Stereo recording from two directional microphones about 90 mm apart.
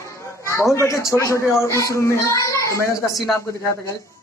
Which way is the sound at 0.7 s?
35° left (ahead or behind).